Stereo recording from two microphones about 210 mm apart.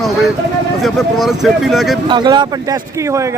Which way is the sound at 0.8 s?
Centre (ahead or behind).